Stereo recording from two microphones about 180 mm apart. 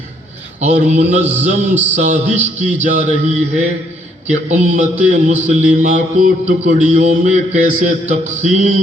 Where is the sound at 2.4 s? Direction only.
10° right (ahead or behind).